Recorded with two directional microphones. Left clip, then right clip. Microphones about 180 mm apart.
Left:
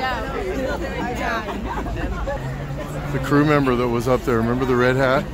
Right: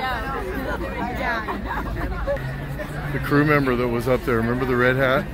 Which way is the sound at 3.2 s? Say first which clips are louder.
Left 1 dB; 10° left (ahead or behind).